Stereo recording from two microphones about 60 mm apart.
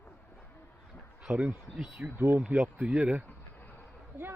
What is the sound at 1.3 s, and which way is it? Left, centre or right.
Speech, right.